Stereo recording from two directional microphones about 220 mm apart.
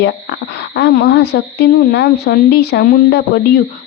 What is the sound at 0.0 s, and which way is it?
Speech, 50° left (ahead or behind).